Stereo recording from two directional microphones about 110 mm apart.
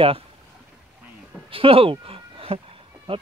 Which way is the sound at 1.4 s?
55° right (ahead or behind).